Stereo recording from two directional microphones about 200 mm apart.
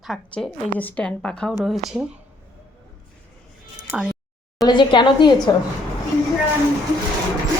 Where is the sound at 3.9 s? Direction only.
Centre (ahead or behind).